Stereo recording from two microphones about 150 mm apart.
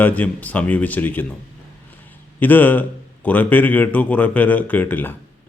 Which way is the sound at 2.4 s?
10° left (ahead or behind).